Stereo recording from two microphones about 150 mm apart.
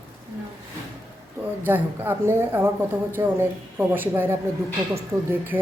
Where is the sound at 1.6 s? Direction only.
15° right (ahead or behind).